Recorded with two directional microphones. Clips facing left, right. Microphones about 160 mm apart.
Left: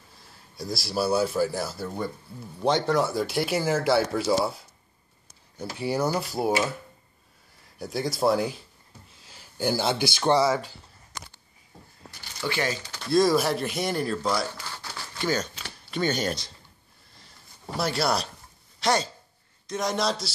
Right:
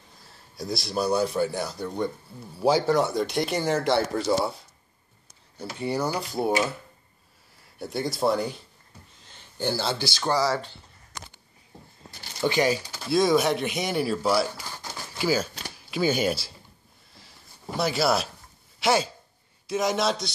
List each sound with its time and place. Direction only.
0.6 s speech: centre (ahead or behind)
5.6 s speech: 10° left (ahead or behind)
7.8 s speech: centre (ahead or behind); by 10.6 s 20° left (ahead or behind)
12.4 s speech: 15° right (ahead or behind)
17.1 s a sound: centre (ahead or behind)
18.8 s speech: 5° right (ahead or behind)